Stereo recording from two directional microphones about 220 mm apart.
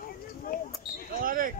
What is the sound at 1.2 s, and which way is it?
Basketball bounce, 40° right (ahead or behind).